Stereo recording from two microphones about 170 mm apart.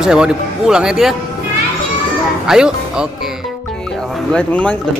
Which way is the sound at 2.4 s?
5° right (ahead or behind).